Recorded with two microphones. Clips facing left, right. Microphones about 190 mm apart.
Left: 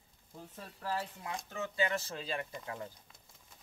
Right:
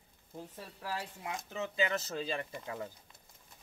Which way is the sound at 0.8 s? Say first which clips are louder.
Left 2 dB; 10° right (ahead or behind).